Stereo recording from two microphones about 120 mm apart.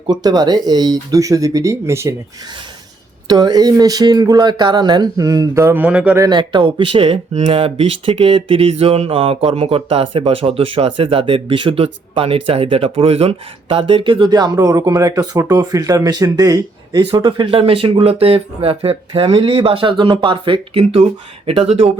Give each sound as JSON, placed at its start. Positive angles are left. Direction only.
{"t": 0.1, "sound": "speech", "side_deg": -35}
{"t": 3.2, "sound": "speech", "side_deg": -35}
{"t": 6.1, "sound": "a sound", "side_deg": -35}